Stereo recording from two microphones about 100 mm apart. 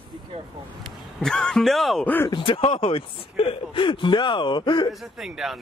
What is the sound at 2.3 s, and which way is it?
Speech, 60° left (ahead or behind).